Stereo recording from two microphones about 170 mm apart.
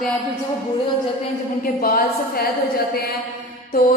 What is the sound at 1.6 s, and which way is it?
Speech, 60° left (ahead or behind).